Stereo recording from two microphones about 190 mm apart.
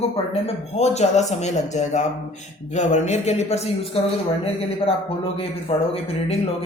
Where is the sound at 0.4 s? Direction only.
35° left (ahead or behind).